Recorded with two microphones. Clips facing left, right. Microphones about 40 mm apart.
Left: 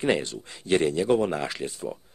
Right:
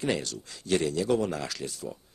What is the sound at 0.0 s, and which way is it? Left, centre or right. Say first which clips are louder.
Speech: left 5 dB; left.